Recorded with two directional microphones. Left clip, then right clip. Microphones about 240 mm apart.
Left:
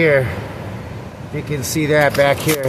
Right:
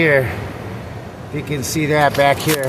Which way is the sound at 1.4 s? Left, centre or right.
Centre.